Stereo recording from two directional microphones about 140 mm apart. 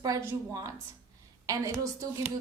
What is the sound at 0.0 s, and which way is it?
A woman's voice, 20° right (ahead or behind).